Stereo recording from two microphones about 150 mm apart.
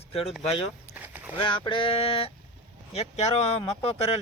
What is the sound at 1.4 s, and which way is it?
Speech, 35° left (ahead or behind).